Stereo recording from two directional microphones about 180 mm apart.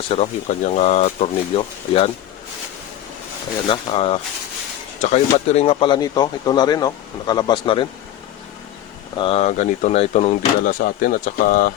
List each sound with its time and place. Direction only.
0.1 s speech: 40° left (ahead or behind)
3.7 s speech: 30° left (ahead or behind)
9.1 s speech: 30° left (ahead or behind)
10.8 s speech: 50° left (ahead or behind)